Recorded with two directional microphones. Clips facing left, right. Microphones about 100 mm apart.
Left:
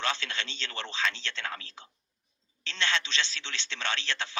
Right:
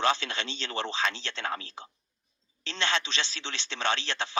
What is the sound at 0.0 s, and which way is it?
A man's voice, 15° right (ahead or behind).